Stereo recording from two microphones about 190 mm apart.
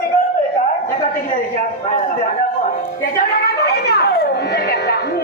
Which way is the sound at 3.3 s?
55° left (ahead or behind).